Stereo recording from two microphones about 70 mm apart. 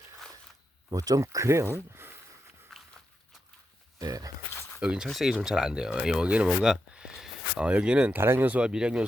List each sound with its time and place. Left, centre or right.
0.9 s speech: right
2.7 s walk: centre
3.9 s speech: right
4.8 s speech: centre
8.1 s speech: right; by 9.0 s centre